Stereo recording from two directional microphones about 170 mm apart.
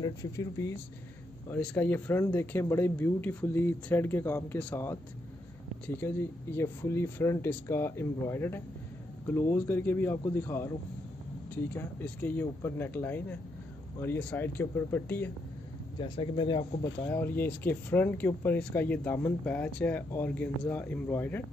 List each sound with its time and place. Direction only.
0.0 s speech: 20° left (ahead or behind)
1.5 s speech: 5° left (ahead or behind)
16.0 s speech: 30° left (ahead or behind)
17.0 s speech: 10° left (ahead or behind)